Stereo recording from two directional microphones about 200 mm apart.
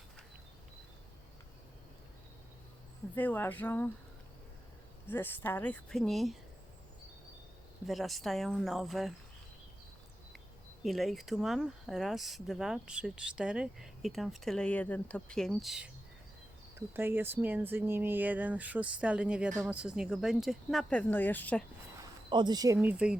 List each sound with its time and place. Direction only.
3.2 s speech: 10° left (ahead or behind)
5.0 s speech: 10° left (ahead or behind)
7.9 s speech: centre (ahead or behind)
10.8 s speech: centre (ahead or behind)
16.9 s speech: 10° right (ahead or behind); by 21.6 s 10° left (ahead or behind)
22.3 s speech: 20° right (ahead or behind); by 23.1 s 5° right (ahead or behind)